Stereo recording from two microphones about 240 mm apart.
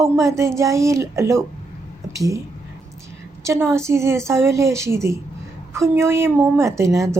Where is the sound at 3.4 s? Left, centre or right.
Centre.